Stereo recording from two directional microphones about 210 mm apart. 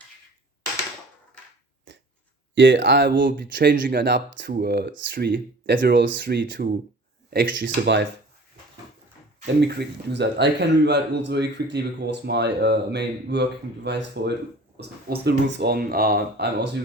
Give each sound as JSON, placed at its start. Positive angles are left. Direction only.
{"t": 1.9, "sound": "finger snapping", "side_deg": -60}
{"t": 2.6, "sound": "a man's voice", "side_deg": -60}
{"t": 9.6, "sound": "a man's voice", "side_deg": -50}